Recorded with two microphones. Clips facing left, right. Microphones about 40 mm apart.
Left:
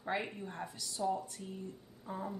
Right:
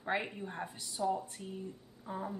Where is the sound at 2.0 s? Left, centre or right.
Centre.